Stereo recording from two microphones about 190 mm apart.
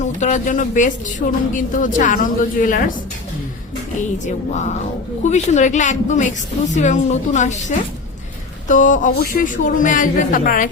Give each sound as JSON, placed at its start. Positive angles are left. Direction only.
{"t": 0.0, "sound": "a woman's voice", "side_deg": 40}
{"t": 5.2, "sound": "a woman's voice", "side_deg": 40}